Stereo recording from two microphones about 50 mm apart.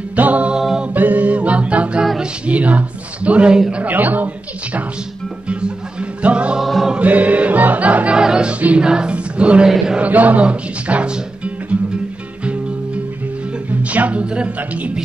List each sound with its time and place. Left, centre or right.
0.1 s music: right
0.5 s music: centre
0.9 s a capella: right
2.1 s speech: right
3.7 s a woman's voice: right
5.5 s music: right
6.6 s music: centre
7.0 s music: right
8.2 s choir: centre
8.5 s music: right
8.8 s choir: centre
9.9 s speech: right
13.7 s music: right
14.2 s speech: centre